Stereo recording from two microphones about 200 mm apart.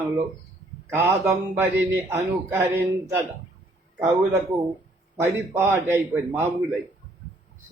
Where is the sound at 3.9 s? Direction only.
10° right (ahead or behind).